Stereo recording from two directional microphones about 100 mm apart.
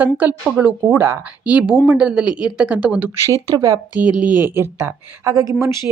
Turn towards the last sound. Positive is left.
turn(degrees=-30)  # may be behind; listen again after turning